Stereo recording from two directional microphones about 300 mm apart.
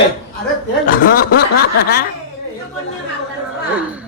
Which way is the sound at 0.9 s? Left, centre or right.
Left.